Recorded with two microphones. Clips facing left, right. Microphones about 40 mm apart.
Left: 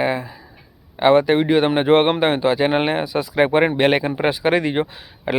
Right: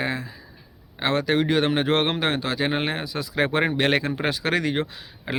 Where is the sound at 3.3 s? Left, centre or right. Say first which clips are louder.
Left 6 dB; centre.